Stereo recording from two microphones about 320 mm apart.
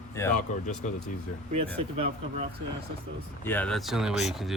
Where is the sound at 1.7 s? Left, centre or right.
Centre.